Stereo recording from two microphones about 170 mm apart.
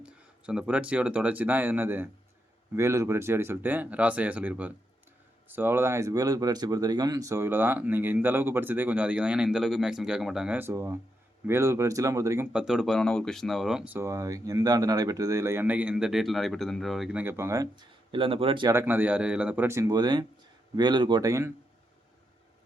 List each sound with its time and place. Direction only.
0.0 s speech: 5° right (ahead or behind)
12.5 s speech: 5° right (ahead or behind); by 18.7 s 30° right (ahead or behind)
18.7 s speech: 15° right (ahead or behind)